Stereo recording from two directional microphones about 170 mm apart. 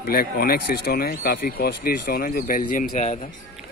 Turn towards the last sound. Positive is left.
turn(degrees=45)  # may be behind; listen again after turning